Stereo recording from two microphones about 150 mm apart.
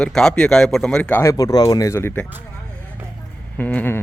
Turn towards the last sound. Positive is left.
turn(degrees=10)  # may be behind; listen again after turning